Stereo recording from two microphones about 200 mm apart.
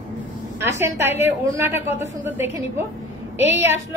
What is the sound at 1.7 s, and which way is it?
Speech, 35° left (ahead or behind).